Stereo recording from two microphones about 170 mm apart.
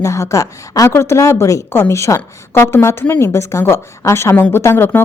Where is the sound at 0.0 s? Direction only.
15° left (ahead or behind).